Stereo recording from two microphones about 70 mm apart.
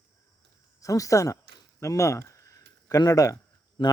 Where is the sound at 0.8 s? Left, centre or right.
Left.